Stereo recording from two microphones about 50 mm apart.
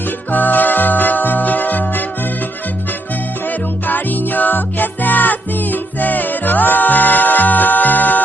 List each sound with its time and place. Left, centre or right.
0.3 s music: left
3.8 s music: left